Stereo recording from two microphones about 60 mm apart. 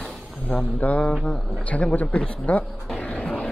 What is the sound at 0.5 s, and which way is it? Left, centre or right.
Speech, centre.